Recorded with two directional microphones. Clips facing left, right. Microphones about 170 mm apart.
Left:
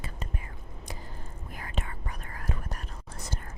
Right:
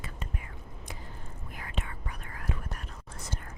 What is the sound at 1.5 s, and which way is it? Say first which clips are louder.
Whispering: left 2 dB; 40° left (ahead or behind).